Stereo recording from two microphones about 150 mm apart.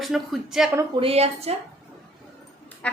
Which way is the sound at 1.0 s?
40° right (ahead or behind).